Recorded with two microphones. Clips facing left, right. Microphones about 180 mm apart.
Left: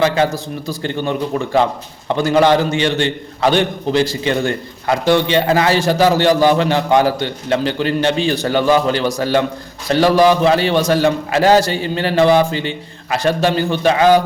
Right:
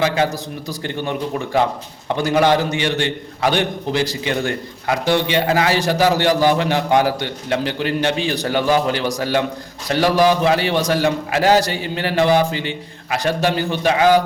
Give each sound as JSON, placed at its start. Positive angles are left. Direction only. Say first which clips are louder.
{"t": 0.7, "sound": "a man's voice", "louder": "left 4 dB", "side_deg": -15}